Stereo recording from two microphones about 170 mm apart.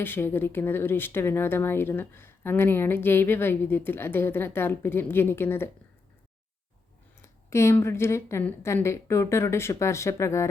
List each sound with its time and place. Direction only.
0.0 s speech: 10° left (ahead or behind)
7.2 s speech: 15° left (ahead or behind)